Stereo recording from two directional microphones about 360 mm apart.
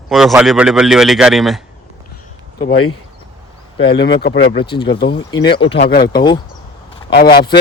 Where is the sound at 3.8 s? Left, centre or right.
Left.